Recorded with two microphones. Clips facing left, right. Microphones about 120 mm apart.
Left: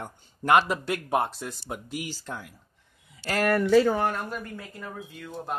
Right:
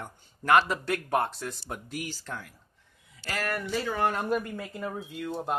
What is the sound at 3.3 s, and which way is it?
Speech, 55° left (ahead or behind).